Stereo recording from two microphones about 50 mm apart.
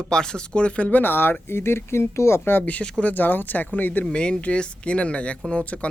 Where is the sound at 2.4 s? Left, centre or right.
Left.